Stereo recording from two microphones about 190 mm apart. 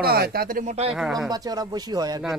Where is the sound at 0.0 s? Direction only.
55° right (ahead or behind).